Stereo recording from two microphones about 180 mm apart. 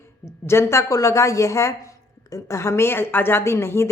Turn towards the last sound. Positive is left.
turn(degrees=15)  # may be behind; listen again after turning